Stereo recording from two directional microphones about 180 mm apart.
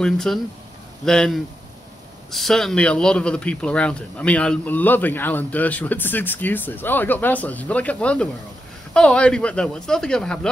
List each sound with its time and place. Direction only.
0.0 s a man's voice: centre (ahead or behind)